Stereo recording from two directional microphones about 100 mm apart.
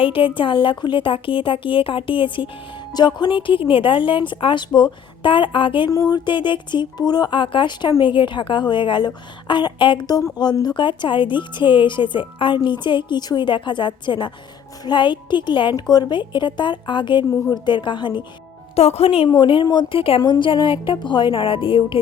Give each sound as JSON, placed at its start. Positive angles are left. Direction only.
{"t": 0.0, "sound": "speech", "side_deg": 60}
{"t": 2.9, "sound": "speech", "side_deg": 45}
{"t": 5.9, "sound": "speech", "side_deg": 40}
{"t": 18.8, "sound": "a woman's voice", "side_deg": 90}
{"t": 19.3, "sound": "speech", "side_deg": 55}
{"t": 19.9, "sound": "a woman's voice", "side_deg": 65}
{"t": 20.2, "sound": "speech", "side_deg": 50}